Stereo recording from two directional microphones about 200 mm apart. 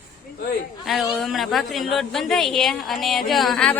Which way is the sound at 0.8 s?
Centre (ahead or behind).